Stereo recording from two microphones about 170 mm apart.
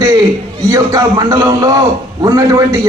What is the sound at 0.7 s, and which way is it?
A man's voice, 20° right (ahead or behind).